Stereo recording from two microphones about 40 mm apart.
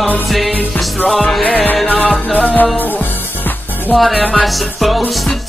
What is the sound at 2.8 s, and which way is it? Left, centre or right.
Music, left.